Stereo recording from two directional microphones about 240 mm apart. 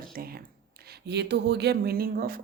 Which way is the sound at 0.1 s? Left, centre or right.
Right.